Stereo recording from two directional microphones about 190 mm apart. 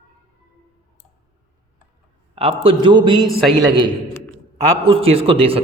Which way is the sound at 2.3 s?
30° right (ahead or behind).